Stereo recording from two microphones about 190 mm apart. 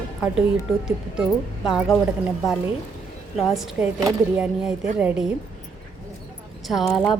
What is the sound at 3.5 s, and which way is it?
Speech, centre (ahead or behind).